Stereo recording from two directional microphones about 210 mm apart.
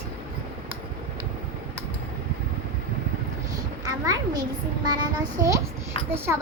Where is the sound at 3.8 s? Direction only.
15° right (ahead or behind).